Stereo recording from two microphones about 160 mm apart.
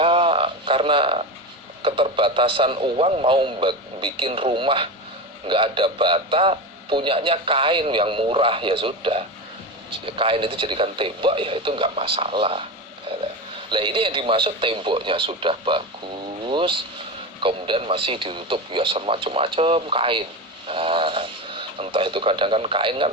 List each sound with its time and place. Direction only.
0.0 s a sound: 35° right (ahead or behind)
1.8 s a man's voice: 35° right (ahead or behind)
13.7 s a man's voice: 30° right (ahead or behind)